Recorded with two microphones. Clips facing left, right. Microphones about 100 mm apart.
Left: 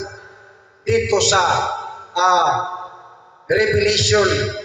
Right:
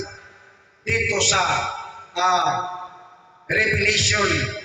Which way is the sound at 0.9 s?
20° left (ahead or behind).